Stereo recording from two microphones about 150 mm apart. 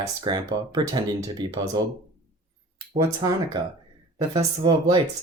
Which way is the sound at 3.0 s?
20° right (ahead or behind).